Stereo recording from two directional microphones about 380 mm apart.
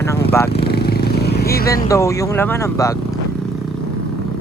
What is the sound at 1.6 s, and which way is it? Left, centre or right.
Speech, centre.